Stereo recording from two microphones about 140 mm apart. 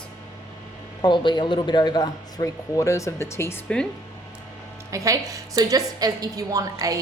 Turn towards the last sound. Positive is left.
turn(degrees=-25)  # may be behind; listen again after turning